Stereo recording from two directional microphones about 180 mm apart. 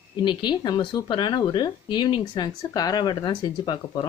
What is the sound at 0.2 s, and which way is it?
A woman's voice, 25° left (ahead or behind).